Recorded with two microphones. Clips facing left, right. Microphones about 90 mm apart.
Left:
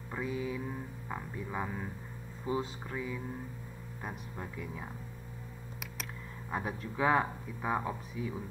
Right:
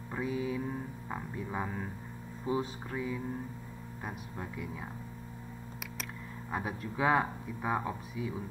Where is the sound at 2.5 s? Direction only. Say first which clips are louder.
Right 1 dB; 25° right (ahead or behind).